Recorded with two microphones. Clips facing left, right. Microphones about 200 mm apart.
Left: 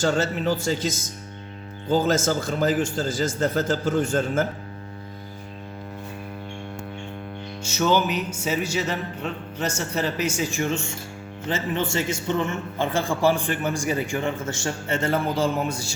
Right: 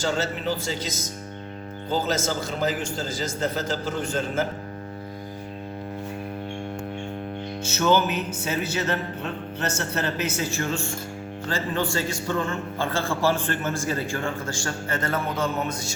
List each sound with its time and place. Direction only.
0.0 s a man's voice: 50° left (ahead or behind)
7.6 s music: 10° left (ahead or behind)
9.6 s a man's voice: 10° left (ahead or behind); by 16.0 s 30° left (ahead or behind)